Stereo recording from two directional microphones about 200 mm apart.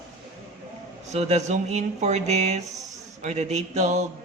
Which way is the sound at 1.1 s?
35° right (ahead or behind).